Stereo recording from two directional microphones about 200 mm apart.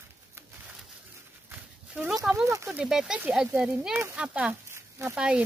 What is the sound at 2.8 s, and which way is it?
Speech, 5° right (ahead or behind).